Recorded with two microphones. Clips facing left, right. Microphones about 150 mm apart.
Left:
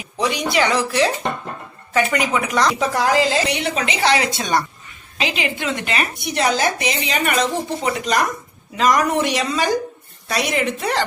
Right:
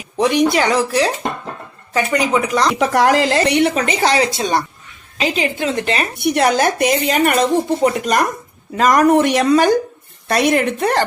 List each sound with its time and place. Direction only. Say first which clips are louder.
0.2 s a woman's voice: right 5 dB; 45° right (ahead or behind)
2.7 s a woman's voice: right 4 dB; 65° right (ahead or behind); by 4.6 s 30° right (ahead or behind)
5.2 s a woman's voice: right 4 dB; 40° right (ahead or behind)
6.1 s speech: right 6 dB; 60° right (ahead or behind)